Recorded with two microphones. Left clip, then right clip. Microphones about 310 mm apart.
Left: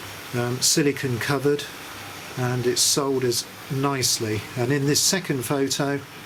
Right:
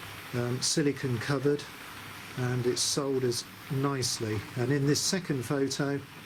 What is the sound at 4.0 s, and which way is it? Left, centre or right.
Speech, centre.